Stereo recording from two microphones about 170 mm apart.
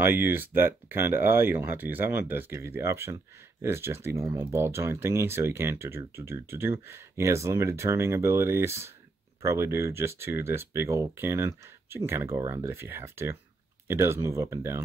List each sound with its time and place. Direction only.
0.0 s speech: 10° right (ahead or behind)